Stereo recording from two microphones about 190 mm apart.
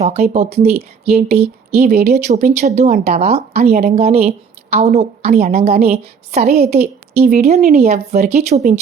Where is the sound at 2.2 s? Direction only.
40° right (ahead or behind).